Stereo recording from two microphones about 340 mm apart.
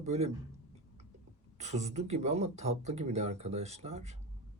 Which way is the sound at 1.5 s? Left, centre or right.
Centre.